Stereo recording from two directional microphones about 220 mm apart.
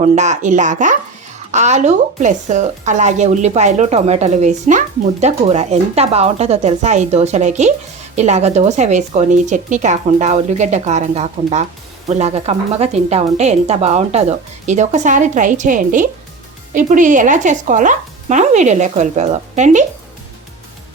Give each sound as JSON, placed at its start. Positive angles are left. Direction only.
{"t": 0.0, "sound": "speech", "side_deg": -35}